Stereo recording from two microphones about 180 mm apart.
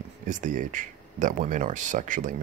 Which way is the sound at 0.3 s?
45° right (ahead or behind).